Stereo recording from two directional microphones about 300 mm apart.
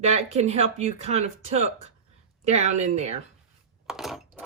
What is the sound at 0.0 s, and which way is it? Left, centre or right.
Speech, right.